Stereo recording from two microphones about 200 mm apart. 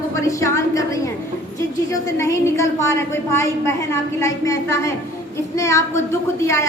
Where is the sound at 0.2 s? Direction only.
15° left (ahead or behind).